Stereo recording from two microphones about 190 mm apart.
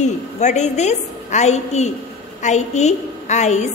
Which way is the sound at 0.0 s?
40° left (ahead or behind).